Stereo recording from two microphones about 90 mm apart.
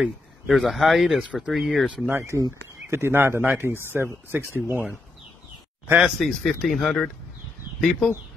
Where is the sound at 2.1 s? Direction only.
30° right (ahead or behind).